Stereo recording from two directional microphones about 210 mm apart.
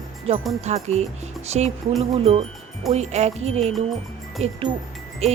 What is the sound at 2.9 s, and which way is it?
Speech, 30° right (ahead or behind).